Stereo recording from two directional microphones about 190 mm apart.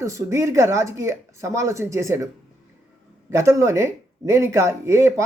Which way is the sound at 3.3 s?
15° right (ahead or behind).